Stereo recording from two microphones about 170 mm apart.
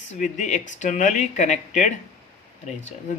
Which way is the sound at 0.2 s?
45° left (ahead or behind).